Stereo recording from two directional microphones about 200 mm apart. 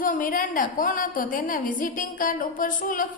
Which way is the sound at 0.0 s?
45° left (ahead or behind).